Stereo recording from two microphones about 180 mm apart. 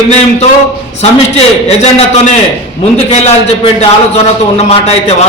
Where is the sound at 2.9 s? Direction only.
35° left (ahead or behind).